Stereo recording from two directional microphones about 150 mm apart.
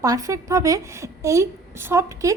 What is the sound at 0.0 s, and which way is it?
Speech, 20° right (ahead or behind).